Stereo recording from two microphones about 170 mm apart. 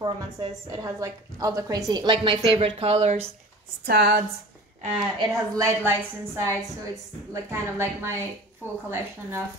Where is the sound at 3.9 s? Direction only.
70° right (ahead or behind).